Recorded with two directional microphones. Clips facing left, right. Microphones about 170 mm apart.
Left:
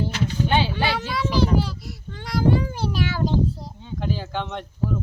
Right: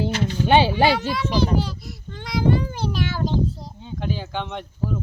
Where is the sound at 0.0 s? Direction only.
80° right.